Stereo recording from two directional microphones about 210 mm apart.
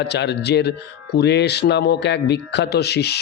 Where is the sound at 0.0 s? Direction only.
55° left (ahead or behind).